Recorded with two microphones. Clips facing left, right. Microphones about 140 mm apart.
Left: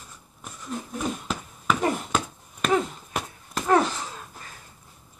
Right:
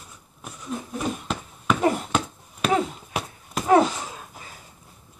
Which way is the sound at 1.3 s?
Centre (ahead or behind).